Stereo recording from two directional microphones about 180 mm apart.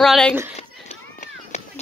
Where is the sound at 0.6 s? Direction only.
35° left (ahead or behind).